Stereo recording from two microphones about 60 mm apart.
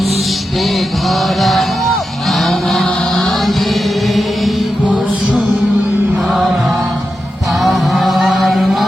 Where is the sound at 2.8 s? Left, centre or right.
Centre.